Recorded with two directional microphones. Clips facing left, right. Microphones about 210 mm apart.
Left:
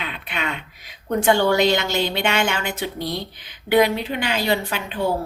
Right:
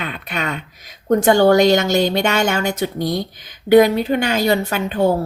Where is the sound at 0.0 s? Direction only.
45° right (ahead or behind).